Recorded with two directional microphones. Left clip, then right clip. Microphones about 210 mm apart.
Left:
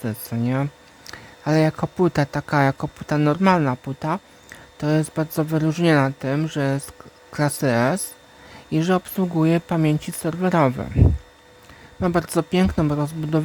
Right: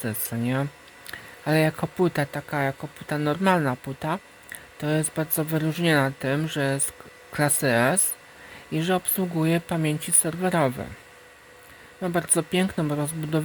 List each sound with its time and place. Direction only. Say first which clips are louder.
0.2 s speech: left 4 dB; 15° left (ahead or behind)
2.1 s speech: left 6 dB; 20° left (ahead or behind)
11.9 s speech: left 4 dB; 20° left (ahead or behind)